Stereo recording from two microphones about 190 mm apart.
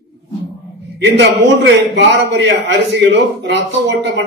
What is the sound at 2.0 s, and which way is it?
A man's voice, 65° right (ahead or behind).